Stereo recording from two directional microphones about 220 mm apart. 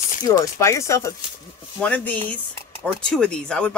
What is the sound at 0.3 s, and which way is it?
Speech, 15° left (ahead or behind).